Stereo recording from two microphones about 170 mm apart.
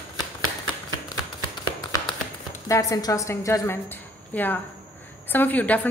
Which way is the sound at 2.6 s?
20° left (ahead or behind).